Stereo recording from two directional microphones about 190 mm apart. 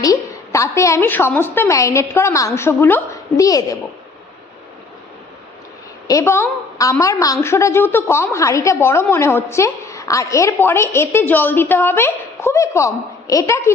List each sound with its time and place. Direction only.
0.0 s a woman's voice: 20° left (ahead or behind)
6.1 s a woman's voice: 15° left (ahead or behind)